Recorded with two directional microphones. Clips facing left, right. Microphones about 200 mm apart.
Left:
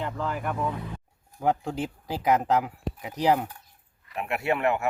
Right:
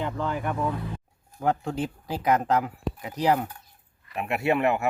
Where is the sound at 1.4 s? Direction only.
15° left (ahead or behind).